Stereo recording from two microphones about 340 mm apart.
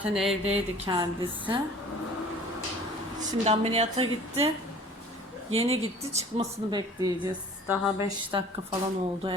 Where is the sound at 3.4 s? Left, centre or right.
Centre.